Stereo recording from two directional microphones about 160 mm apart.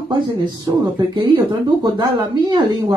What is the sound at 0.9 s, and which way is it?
Speech, 30° right (ahead or behind).